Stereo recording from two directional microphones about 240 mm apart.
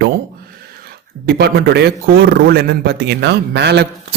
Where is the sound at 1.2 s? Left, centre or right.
Right.